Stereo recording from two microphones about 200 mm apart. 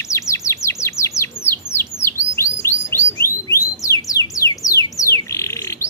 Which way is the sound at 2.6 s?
15° left (ahead or behind).